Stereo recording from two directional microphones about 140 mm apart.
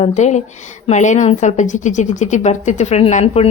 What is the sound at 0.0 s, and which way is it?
A woman's voice, 55° left (ahead or behind).